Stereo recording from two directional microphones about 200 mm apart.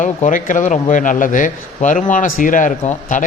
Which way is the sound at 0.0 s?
40° left (ahead or behind).